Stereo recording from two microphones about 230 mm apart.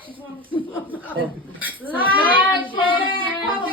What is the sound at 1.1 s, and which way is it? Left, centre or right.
Speech, centre.